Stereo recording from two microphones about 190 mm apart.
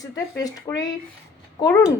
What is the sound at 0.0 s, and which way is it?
A woman's voice, 20° left (ahead or behind).